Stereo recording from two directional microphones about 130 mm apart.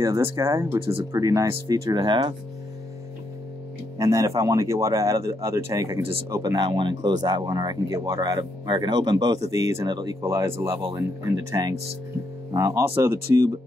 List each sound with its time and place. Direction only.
0.4 s speech: 20° right (ahead or behind)
0.7 s speech: 45° right (ahead or behind)
1.1 s speech: 25° right (ahead or behind)
4.0 s speech: 25° right (ahead or behind)
10.2 s speech: 20° right (ahead or behind)
11.6 s speech: 30° right (ahead or behind)